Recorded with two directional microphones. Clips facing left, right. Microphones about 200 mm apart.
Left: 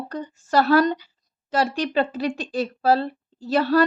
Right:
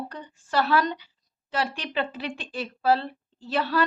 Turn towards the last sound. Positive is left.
turn(degrees=40)  # may be behind; listen again after turning